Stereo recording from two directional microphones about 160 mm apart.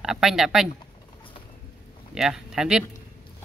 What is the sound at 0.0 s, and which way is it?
Speech, 5° right (ahead or behind).